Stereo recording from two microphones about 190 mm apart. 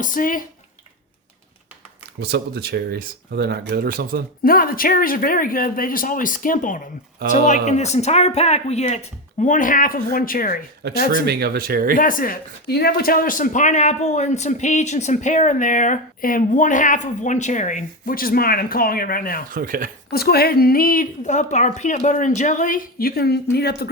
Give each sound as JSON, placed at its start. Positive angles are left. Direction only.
{"t": 0.0, "sound": "speech", "side_deg": 45}
{"t": 2.2, "sound": "speech", "side_deg": -60}
{"t": 4.4, "sound": "speech", "side_deg": 50}
{"t": 11.3, "sound": "speech", "side_deg": -55}
{"t": 11.9, "sound": "speech", "side_deg": 45}
{"t": 19.5, "sound": "speech", "side_deg": -50}
{"t": 20.1, "sound": "speech", "side_deg": 55}